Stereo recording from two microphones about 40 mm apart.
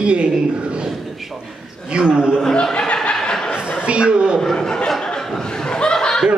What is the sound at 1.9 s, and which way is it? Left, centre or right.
Speech, right.